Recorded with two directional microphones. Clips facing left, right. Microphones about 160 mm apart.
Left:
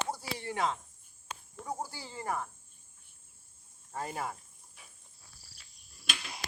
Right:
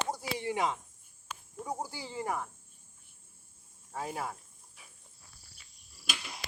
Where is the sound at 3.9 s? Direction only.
Centre (ahead or behind).